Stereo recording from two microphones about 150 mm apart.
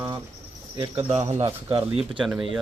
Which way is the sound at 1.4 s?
35° right (ahead or behind).